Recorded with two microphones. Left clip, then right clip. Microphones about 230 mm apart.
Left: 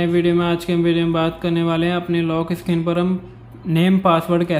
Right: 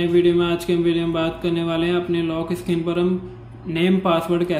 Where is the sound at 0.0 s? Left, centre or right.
Centre.